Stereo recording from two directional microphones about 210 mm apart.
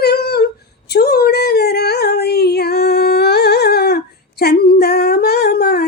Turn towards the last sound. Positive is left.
turn(degrees=45)  # may be behind; listen again after turning